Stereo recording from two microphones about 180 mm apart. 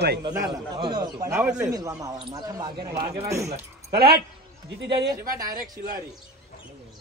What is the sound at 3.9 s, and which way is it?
A man's voice, 60° right (ahead or behind).